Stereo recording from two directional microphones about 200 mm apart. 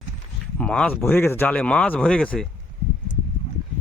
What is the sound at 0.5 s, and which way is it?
Speech, 5° left (ahead or behind).